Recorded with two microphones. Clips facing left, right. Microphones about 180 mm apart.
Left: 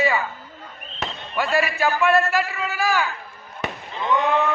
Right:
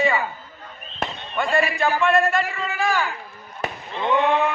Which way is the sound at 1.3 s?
5° left (ahead or behind).